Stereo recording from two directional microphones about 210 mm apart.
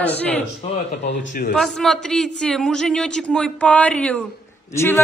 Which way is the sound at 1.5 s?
Centre (ahead or behind).